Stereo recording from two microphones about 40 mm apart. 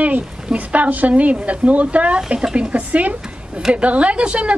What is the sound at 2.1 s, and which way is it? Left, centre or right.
A woman's voice, right.